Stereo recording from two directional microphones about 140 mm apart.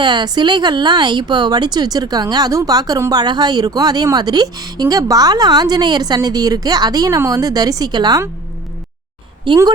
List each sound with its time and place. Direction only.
0.0 s speech: 30° right (ahead or behind)
9.5 s a woman's voice: 35° right (ahead or behind)